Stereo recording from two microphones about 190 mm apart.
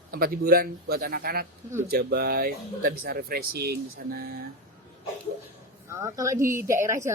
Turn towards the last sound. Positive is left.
turn(degrees=-15)  # may be behind; listen again after turning